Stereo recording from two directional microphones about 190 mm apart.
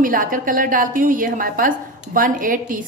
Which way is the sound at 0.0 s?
45° right (ahead or behind).